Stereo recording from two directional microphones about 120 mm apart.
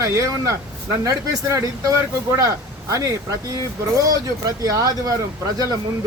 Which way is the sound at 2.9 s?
30° right (ahead or behind).